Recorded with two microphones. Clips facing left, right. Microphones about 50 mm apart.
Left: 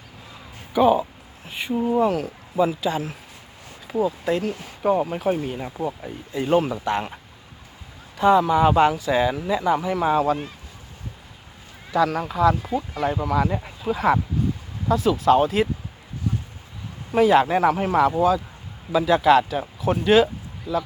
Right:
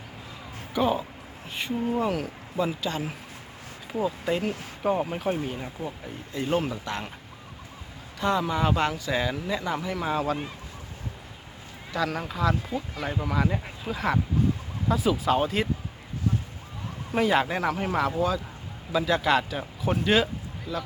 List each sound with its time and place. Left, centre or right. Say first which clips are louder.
0.7 s speech: left 8 dB; centre
4.0 s speech: left 4 dB; centre
6.3 s speech: left 6 dB; centre
8.2 s speech: left 9 dB; centre
11.9 s speech: left 7 dB; centre
14.8 s speech: left 6 dB; centre
17.1 s speech: left 7 dB; centre